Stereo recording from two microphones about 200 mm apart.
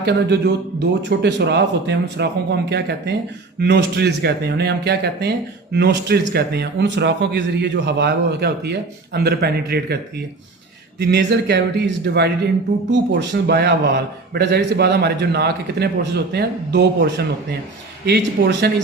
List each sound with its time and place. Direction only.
0.0 s a man's voice: 55° right (ahead or behind)
11.0 s a man's voice: 60° right (ahead or behind)